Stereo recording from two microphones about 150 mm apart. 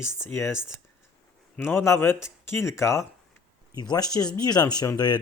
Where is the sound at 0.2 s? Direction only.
15° left (ahead or behind).